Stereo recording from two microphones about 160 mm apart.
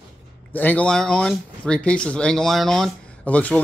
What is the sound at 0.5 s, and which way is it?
Speech, 10° left (ahead or behind).